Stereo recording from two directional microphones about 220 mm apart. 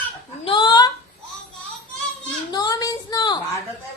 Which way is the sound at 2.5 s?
15° left (ahead or behind).